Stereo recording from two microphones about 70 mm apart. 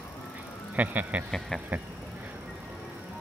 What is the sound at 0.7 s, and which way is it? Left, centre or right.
Speech, right.